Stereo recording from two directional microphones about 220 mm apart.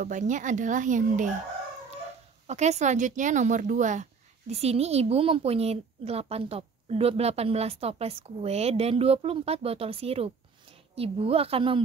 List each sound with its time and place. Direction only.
0.0 s speech: 35° right (ahead or behind)
2.4 s speech: 30° right (ahead or behind)